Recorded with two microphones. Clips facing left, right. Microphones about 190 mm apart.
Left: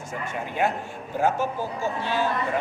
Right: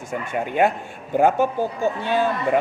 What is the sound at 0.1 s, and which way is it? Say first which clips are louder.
A man's voice: right 7 dB; 60° right (ahead or behind).